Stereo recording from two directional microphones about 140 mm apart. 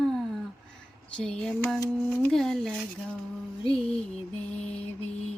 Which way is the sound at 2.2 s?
5° left (ahead or behind).